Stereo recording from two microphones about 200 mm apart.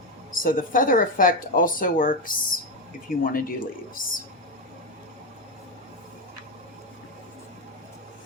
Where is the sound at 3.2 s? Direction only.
45° left (ahead or behind).